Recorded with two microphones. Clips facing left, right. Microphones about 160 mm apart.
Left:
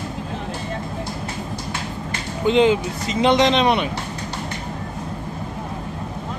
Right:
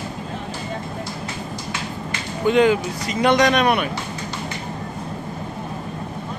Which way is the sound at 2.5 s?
25° left (ahead or behind).